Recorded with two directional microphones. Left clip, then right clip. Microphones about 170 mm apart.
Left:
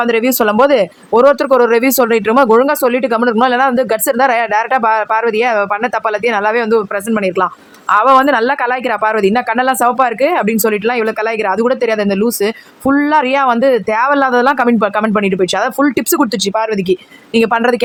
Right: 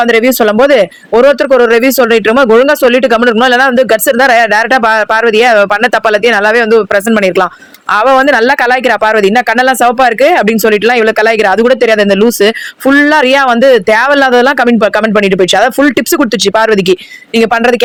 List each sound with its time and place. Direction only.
0.1 s speech: 15° right (ahead or behind); by 17.0 s 30° right (ahead or behind)
17.3 s speech: 15° right (ahead or behind)